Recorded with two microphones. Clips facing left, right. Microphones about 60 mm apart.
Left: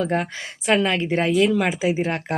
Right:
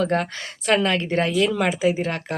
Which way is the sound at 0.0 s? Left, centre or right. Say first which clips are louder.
Right 1 dB; centre.